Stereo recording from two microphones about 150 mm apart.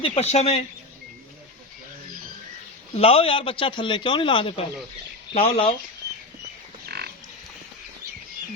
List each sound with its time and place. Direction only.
0.0 s speech: 45° left (ahead or behind)
2.9 s a man's voice: 40° left (ahead or behind)
6.8 s pig: 90° right